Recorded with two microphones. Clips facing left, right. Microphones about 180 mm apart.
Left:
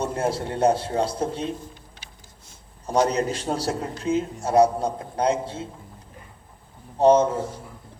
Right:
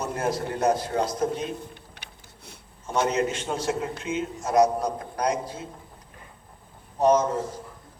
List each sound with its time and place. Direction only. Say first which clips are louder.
0.0 s a man's voice: left 2 dB; 30° left (ahead or behind)
1.6 s a sound: even; 65° right (ahead or behind)
2.8 s a man's voice: left 3 dB; 35° left (ahead or behind)
7.0 s a man's voice: left 4 dB; 30° left (ahead or behind)